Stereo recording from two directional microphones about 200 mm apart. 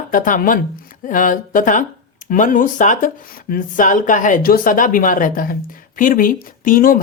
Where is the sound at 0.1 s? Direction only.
40° left (ahead or behind).